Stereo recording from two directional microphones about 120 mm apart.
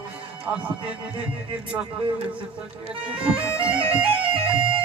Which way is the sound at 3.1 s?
10° right (ahead or behind).